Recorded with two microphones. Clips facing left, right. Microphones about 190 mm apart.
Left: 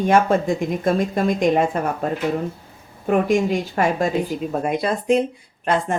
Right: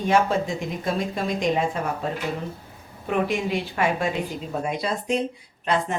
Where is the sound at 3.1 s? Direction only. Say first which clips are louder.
Left 6 dB; 45° left (ahead or behind).